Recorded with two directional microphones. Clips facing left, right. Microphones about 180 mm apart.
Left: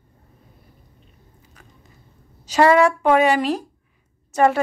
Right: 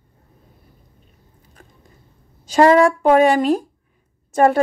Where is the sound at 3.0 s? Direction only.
45° right (ahead or behind).